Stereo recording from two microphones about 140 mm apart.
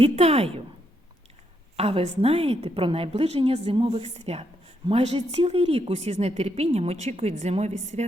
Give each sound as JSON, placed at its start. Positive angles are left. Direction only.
{"t": 0.0, "sound": "a woman's voice", "side_deg": -45}
{"t": 1.7, "sound": "a woman's voice", "side_deg": -45}